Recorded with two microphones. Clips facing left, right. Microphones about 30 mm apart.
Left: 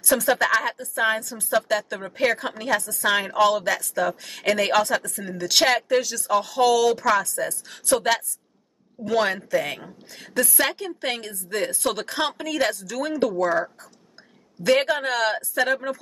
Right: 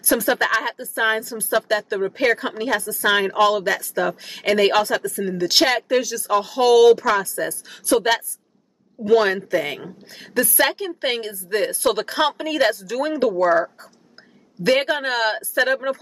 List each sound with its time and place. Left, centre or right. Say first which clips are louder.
0.1 s a woman's voice: right 1 dB; centre
1.3 s speech: right 2 dB; right
2.0 s a woman's voice: right 4 dB; centre
7.0 s a woman's voice: right 1 dB; centre
7.2 s speech: right 2 dB; right
7.7 s a woman's voice: right 3 dB; centre
14.8 s a woman's voice: right 1 dB; centre